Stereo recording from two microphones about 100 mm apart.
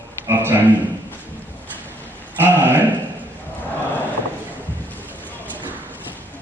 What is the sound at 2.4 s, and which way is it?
Speech, 20° right (ahead or behind).